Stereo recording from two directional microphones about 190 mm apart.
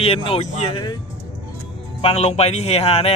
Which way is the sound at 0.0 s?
30° left (ahead or behind).